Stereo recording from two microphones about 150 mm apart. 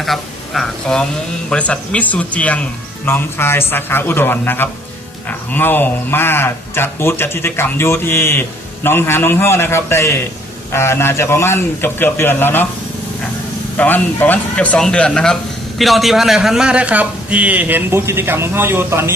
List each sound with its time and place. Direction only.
0.0 s speech: centre (ahead or behind)
13.7 s speech: 10° left (ahead or behind); by 19.1 s 15° right (ahead or behind)